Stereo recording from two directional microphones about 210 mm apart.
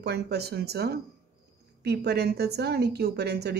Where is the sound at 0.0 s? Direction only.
50° right (ahead or behind).